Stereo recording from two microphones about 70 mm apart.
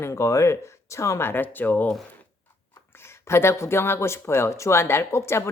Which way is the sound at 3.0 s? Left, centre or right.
Left.